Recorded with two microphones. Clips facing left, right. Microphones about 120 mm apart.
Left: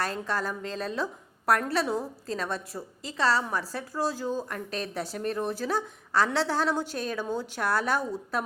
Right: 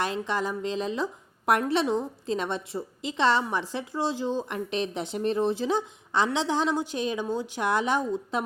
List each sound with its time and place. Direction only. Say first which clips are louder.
0.3 s speech: right 3 dB; 15° right (ahead or behind)